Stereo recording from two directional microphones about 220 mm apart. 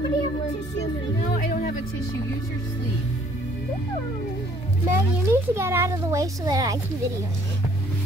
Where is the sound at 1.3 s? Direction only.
40° left (ahead or behind).